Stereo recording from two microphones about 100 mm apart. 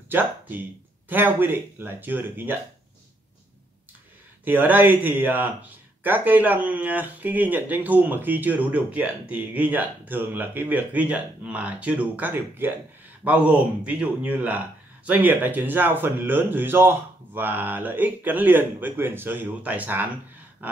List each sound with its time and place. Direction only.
0.1 s speech: 20° right (ahead or behind)
4.5 s speech: 20° right (ahead or behind)